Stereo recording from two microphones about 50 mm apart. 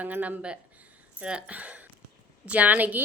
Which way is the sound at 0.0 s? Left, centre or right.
Right.